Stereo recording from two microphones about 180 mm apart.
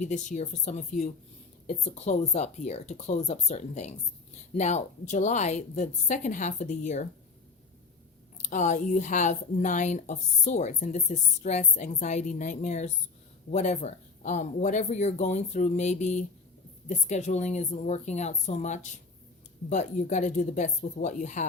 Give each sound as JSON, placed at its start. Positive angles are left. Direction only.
{"t": 0.0, "sound": "speech", "side_deg": 45}
{"t": 8.4, "sound": "speech", "side_deg": 45}